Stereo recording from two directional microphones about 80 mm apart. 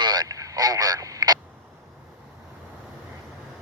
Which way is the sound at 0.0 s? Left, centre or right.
Right.